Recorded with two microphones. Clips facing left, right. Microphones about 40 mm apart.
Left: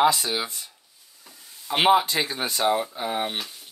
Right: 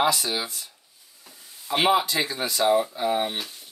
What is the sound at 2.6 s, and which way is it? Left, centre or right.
Speech, centre.